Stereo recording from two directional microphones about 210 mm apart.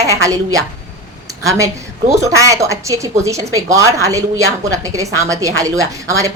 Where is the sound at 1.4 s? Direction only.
15° right (ahead or behind).